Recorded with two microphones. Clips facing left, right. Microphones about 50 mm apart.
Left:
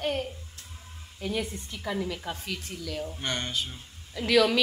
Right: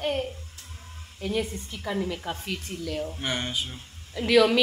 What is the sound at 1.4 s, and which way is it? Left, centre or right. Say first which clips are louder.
A woman's voice: right 1 dB; centre.